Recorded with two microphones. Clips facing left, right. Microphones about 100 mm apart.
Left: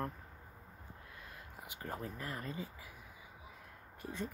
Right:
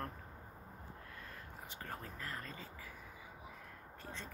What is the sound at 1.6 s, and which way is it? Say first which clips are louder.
Speech: left 5 dB; 15° left (ahead or behind).